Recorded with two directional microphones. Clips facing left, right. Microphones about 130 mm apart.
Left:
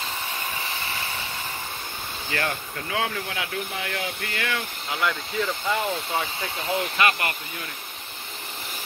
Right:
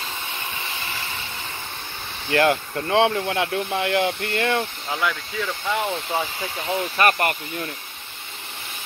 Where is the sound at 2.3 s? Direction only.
60° right (ahead or behind).